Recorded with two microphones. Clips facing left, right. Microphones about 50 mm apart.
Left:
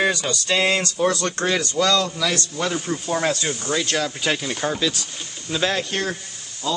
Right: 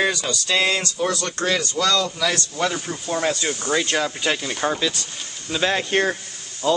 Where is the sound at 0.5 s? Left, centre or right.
Centre.